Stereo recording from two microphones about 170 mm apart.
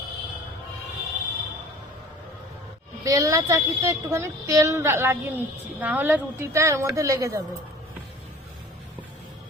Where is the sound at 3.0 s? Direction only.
20° right (ahead or behind).